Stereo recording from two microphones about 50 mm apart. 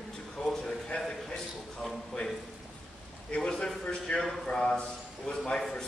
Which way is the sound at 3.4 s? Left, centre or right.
Centre.